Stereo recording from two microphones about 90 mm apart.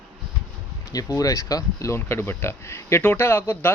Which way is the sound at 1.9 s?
25° left (ahead or behind).